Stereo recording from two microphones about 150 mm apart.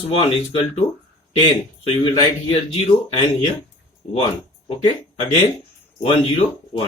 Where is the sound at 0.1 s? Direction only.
40° left (ahead or behind).